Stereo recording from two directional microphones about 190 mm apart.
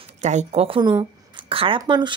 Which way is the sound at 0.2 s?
40° right (ahead or behind).